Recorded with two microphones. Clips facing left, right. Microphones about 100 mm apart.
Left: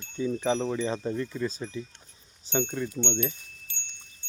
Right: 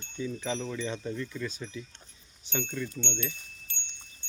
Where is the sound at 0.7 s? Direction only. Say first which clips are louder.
Left 5 dB; 30° left (ahead or behind).